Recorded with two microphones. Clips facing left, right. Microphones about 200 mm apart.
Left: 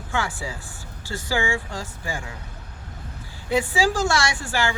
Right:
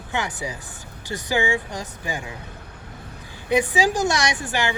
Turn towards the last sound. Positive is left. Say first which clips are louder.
# right 1 dB
turn(degrees=-20)  # may be behind; listen again after turning